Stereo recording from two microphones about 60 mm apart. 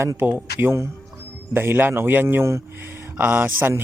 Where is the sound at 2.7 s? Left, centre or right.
Right.